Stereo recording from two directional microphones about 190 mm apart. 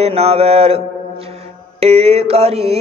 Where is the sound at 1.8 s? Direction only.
30° right (ahead or behind).